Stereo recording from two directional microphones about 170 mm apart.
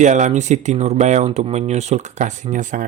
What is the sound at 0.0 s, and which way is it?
Speech, 45° right (ahead or behind).